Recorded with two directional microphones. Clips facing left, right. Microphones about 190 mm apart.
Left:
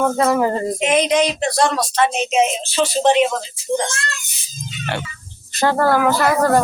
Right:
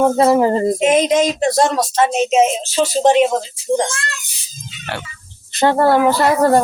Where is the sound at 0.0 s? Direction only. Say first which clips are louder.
Right 4 dB; 25° right (ahead or behind).